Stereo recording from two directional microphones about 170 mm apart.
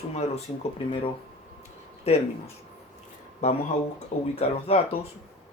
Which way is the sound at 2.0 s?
35° left (ahead or behind).